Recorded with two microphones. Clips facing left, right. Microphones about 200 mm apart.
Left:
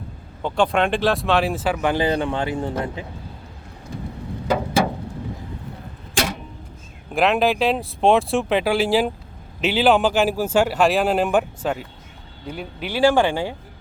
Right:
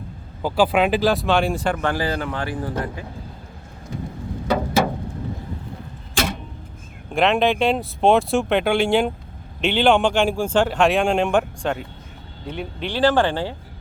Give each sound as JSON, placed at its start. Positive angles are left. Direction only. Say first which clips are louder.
{"t": 0.4, "sound": "speech", "louder": "right 2 dB", "side_deg": -5}
{"t": 1.9, "sound": "a man's voice", "louder": "left 3 dB", "side_deg": 20}
{"t": 7.1, "sound": "speech", "louder": "even", "side_deg": 0}